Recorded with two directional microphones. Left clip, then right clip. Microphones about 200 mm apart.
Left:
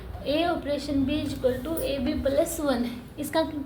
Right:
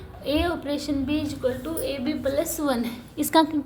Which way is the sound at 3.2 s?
50° right (ahead or behind).